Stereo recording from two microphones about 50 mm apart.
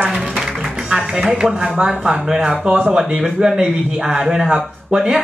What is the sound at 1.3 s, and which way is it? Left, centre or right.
A man's voice, centre.